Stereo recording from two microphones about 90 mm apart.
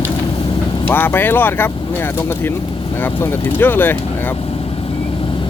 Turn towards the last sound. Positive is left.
turn(degrees=25)  # may be behind; listen again after turning